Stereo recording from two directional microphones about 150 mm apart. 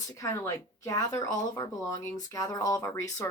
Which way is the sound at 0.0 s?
20° left (ahead or behind).